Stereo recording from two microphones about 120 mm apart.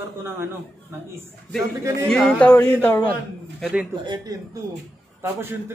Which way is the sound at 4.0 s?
40° right (ahead or behind).